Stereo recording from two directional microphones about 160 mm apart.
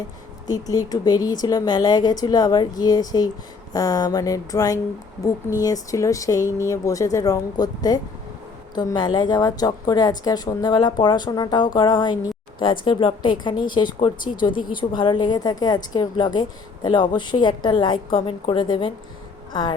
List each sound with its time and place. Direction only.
0.4 s a woman's voice: 25° left (ahead or behind)